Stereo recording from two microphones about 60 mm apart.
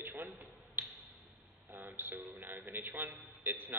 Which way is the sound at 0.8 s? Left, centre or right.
Right.